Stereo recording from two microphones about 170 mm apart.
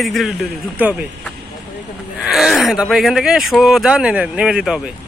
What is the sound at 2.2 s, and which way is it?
Speech, centre (ahead or behind).